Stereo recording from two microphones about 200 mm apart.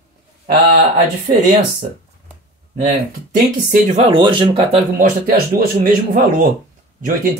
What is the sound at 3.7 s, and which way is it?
Speech, 30° right (ahead or behind).